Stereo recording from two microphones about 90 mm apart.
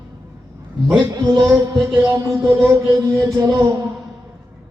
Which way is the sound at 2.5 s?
30° right (ahead or behind).